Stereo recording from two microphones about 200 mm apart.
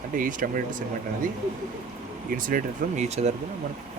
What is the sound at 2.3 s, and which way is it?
Speech, 45° right (ahead or behind).